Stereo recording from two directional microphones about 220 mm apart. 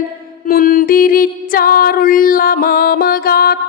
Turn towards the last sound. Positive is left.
turn(degrees=45)  # may be behind; listen again after turning